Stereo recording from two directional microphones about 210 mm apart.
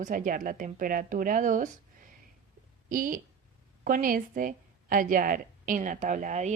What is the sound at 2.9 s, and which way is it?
A woman's voice, 40° right (ahead or behind).